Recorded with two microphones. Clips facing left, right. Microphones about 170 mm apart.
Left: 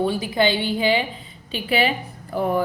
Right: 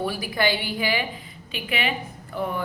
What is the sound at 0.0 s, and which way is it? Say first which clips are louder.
A woman's voice: left 5 dB; 25° left (ahead or behind).